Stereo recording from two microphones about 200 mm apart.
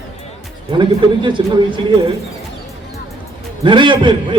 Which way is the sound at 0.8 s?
25° right (ahead or behind).